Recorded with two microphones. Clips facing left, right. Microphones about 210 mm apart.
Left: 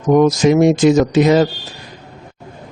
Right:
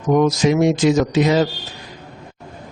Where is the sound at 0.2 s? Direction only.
45° left (ahead or behind).